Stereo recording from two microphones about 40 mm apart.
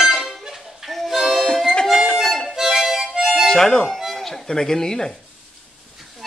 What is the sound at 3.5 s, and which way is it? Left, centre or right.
Speech, centre.